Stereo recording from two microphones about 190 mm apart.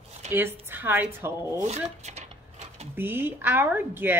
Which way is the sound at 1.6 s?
35° right (ahead or behind).